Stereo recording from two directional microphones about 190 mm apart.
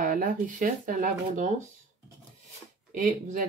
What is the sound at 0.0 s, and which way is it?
Speech, 45° right (ahead or behind).